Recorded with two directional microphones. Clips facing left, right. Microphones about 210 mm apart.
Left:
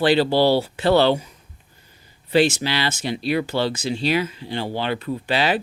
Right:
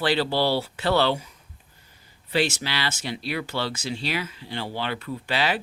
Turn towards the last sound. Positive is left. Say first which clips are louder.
# left 5 dB
turn(degrees=20)  # may be behind; listen again after turning